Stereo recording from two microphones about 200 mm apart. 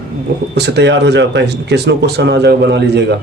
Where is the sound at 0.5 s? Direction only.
60° right (ahead or behind).